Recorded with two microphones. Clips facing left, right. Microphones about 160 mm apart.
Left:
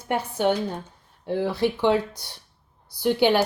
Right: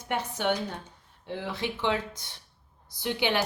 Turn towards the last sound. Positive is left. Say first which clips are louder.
# left 8 dB
turn(degrees=40)  # may be behind; listen again after turning